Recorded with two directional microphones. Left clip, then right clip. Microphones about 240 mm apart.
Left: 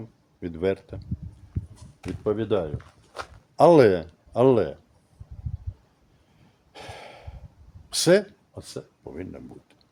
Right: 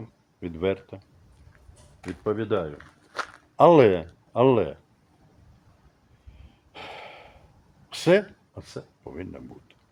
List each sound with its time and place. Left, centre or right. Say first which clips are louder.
0.4 s speech: left 1 dB; centre
2.2 s speech: left 1 dB; centre
2.7 s walk: right 4 dB; centre
3.6 s speech: even; centre
6.7 s a sound: right 1 dB; centre
7.9 s speech: left 1 dB; centre